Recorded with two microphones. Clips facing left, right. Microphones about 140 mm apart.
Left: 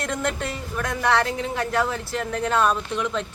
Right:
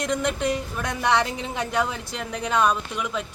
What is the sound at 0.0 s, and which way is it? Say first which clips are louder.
Speech: right 2 dB; 15° right (ahead or behind).